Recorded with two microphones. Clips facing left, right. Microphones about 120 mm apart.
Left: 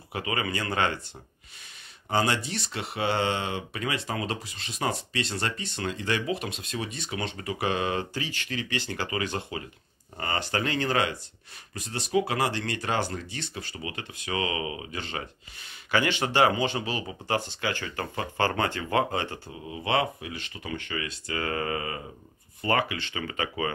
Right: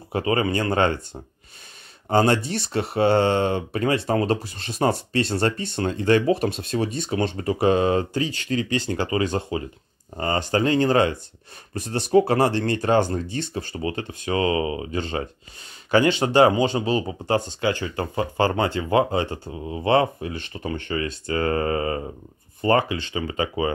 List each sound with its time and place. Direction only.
0.1 s speech: 35° right (ahead or behind)
2.0 s speech: 45° right (ahead or behind)
11.8 s speech: 45° right (ahead or behind); by 23.7 s 25° right (ahead or behind)